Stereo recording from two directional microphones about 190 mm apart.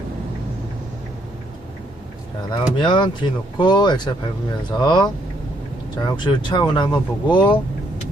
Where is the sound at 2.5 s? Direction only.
25° left (ahead or behind).